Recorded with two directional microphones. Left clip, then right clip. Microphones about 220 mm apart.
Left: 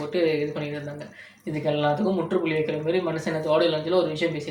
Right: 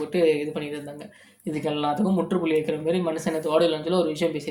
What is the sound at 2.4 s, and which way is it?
Speech, 50° right (ahead or behind).